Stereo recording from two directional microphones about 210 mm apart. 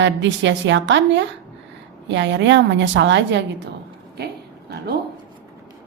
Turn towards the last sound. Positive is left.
turn(degrees=-50)  # may be behind; listen again after turning